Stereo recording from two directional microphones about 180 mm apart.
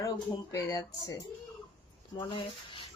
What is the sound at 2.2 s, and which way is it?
Speech, 25° left (ahead or behind).